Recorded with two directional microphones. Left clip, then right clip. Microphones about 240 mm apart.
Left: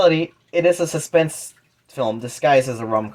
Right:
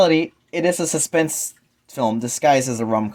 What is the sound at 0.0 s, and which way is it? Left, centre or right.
Speech, right.